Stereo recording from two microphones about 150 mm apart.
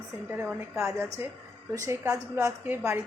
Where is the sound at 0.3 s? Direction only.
10° right (ahead or behind).